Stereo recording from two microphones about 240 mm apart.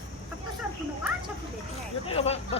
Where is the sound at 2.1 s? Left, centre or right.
Left.